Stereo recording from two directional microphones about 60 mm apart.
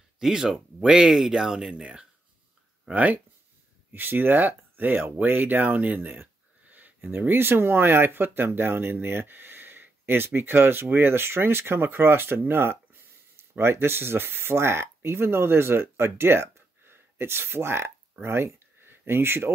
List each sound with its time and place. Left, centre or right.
0.2 s speech: centre
2.9 s speech: right